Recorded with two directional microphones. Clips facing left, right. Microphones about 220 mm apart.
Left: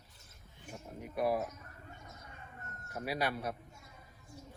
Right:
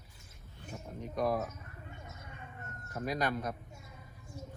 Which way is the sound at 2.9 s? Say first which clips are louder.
Right 2 dB; 10° left (ahead or behind).